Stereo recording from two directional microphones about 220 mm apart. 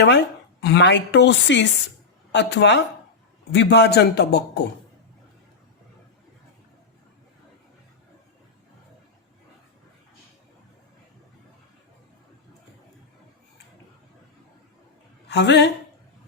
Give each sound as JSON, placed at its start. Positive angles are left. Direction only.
{"t": 0.1, "sound": "speech", "side_deg": 50}
{"t": 15.3, "sound": "speech", "side_deg": 50}